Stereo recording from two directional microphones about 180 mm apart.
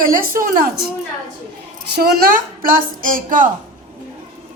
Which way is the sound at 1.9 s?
60° right (ahead or behind).